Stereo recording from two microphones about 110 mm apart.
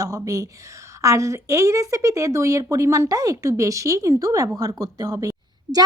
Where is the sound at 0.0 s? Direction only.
30° right (ahead or behind).